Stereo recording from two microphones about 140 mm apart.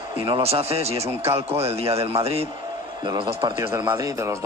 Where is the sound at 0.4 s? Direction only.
45° right (ahead or behind).